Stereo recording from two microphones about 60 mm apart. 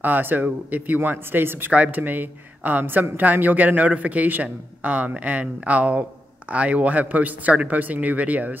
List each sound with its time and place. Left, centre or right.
0.0 s speech: right